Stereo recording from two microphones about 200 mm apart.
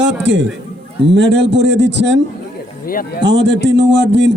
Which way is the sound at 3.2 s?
60° right (ahead or behind).